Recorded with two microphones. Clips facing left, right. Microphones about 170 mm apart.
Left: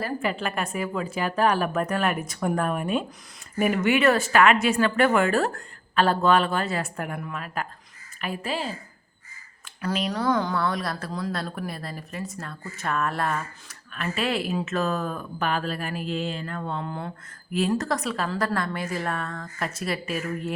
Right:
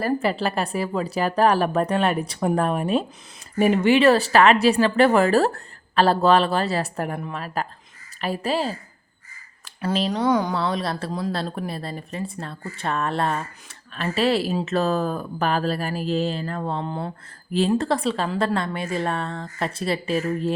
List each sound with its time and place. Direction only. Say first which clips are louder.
0.0 s speech: right 5 dB; 35° right (ahead or behind)